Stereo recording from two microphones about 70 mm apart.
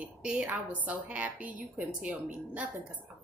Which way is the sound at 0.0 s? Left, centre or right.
Centre.